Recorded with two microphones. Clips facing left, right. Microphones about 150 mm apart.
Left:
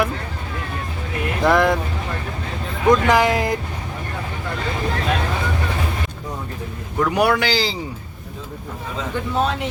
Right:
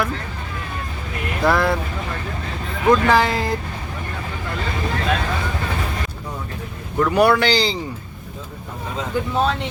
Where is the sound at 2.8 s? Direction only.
15° left (ahead or behind).